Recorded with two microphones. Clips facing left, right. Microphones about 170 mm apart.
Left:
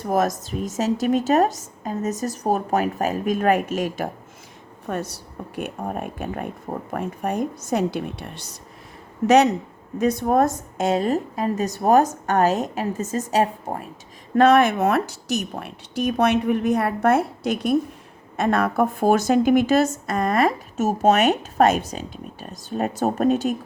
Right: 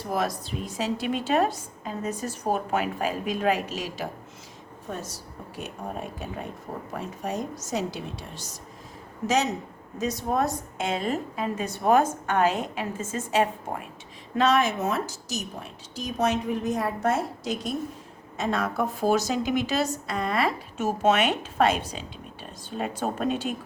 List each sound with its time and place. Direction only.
0.0 s a woman's voice: 45° left (ahead or behind)
4.9 s a woman's voice: 65° left (ahead or behind); by 13.8 s 40° left (ahead or behind)
14.3 s a woman's voice: 55° left (ahead or behind)